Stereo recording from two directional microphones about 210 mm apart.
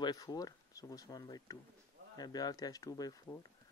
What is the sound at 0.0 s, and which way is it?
Speech, 20° left (ahead or behind).